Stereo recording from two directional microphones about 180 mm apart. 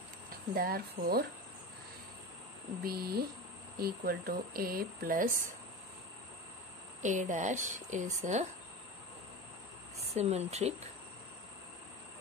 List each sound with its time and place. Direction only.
0.6 s speech: 55° right (ahead or behind)
2.8 s speech: 55° right (ahead or behind)
7.0 s speech: 45° right (ahead or behind)
10.1 s speech: 35° right (ahead or behind)